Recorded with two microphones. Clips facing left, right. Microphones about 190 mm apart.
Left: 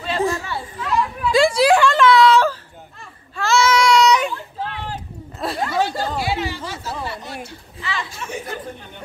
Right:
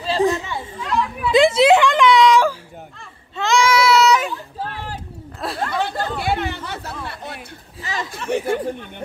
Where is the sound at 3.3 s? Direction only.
15° right (ahead or behind).